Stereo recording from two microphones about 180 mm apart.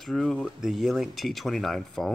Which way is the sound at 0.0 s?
Centre (ahead or behind).